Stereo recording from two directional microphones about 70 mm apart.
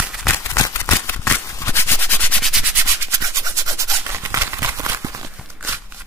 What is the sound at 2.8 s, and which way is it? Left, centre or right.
Rub, right.